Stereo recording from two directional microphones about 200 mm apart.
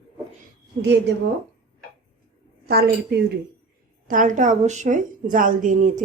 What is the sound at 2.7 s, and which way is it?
Speech, 50° right (ahead or behind).